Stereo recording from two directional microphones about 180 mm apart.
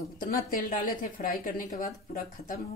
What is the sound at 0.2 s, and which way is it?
Speech, 50° left (ahead or behind).